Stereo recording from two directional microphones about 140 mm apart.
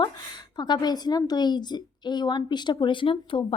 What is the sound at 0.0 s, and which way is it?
A woman's voice, 30° left (ahead or behind).